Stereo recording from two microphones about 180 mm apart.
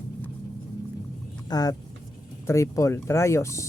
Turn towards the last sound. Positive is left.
turn(degrees=15)  # may be behind; listen again after turning